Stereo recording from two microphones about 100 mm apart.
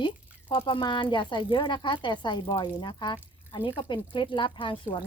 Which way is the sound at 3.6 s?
60° left (ahead or behind).